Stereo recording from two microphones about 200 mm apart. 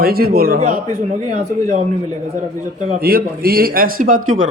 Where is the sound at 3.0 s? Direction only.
50° right (ahead or behind).